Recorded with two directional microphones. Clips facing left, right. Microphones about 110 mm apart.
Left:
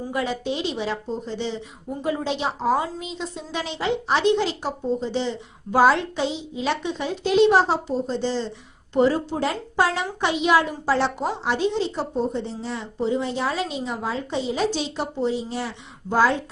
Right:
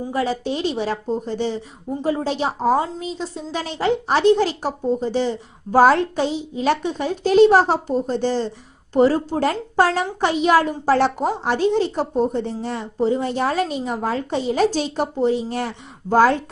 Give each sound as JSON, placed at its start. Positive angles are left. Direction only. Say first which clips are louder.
{"t": 0.1, "sound": "a woman's voice", "louder": "right 3 dB", "side_deg": -35}